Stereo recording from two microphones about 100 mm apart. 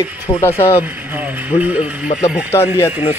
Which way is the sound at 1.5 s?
80° left.